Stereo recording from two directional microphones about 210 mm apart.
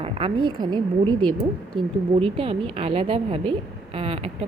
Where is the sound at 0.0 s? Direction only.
25° right (ahead or behind).